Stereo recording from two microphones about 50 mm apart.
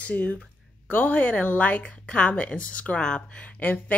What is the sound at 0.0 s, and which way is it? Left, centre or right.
Speech, left.